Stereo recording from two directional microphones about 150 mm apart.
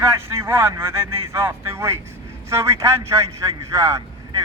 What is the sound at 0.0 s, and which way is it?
A man's voice, 15° right (ahead or behind).